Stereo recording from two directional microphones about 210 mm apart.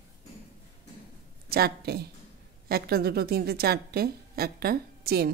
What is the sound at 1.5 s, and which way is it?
A woman's voice, 50° right (ahead or behind).